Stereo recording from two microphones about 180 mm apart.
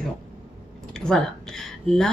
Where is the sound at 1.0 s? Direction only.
5° left (ahead or behind).